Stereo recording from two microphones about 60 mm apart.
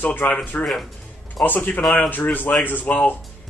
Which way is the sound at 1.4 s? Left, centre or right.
Left.